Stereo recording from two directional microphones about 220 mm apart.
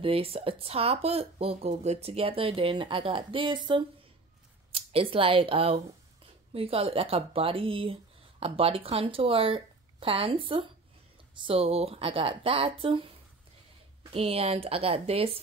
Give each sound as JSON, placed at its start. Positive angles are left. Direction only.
{"t": 0.0, "sound": "speech", "side_deg": -25}
{"t": 14.1, "sound": "speech", "side_deg": -25}